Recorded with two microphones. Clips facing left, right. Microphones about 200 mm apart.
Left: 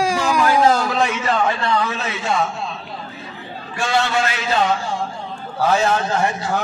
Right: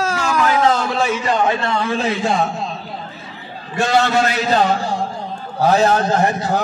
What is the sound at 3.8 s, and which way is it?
A man's voice, 40° right (ahead or behind).